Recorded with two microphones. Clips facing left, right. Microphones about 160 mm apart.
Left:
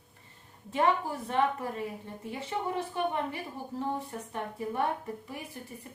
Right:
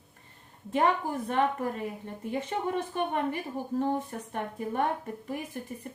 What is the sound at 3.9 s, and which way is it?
Speech, 55° right (ahead or behind).